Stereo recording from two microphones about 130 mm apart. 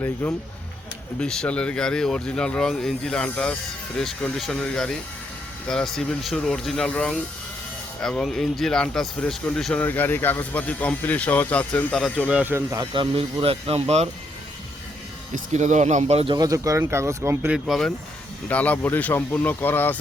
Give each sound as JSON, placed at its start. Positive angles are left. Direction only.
{"t": 0.0, "sound": "speech", "side_deg": 15}
{"t": 12.3, "sound": "speech", "side_deg": -15}
{"t": 12.9, "sound": "speech", "side_deg": -40}
{"t": 15.5, "sound": "speech", "side_deg": -65}
{"t": 16.3, "sound": "speech", "side_deg": -30}
{"t": 17.5, "sound": "speech", "side_deg": 0}
{"t": 18.4, "sound": "speech", "side_deg": 10}